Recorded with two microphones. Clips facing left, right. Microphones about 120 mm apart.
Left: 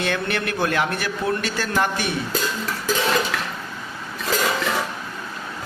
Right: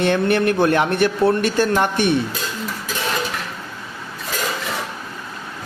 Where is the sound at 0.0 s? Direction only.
20° right (ahead or behind).